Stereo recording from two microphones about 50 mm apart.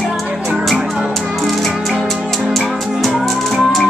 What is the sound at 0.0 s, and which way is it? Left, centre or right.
Music, centre.